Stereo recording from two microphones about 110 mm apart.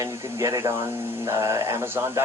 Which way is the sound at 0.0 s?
30° right (ahead or behind).